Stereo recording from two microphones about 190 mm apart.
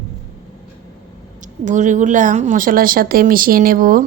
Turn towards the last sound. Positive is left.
turn(degrees=-45)  # may be behind; listen again after turning